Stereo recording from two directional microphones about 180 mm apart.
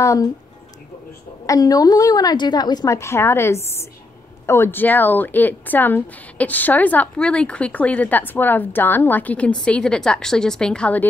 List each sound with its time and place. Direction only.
0.0 s speech: 15° left (ahead or behind)
1.4 s a woman's voice: 20° left (ahead or behind)